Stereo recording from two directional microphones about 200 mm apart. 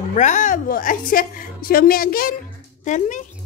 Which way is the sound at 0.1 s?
40° left (ahead or behind).